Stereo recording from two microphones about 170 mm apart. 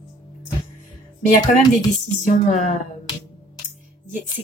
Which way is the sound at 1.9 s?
45° left (ahead or behind).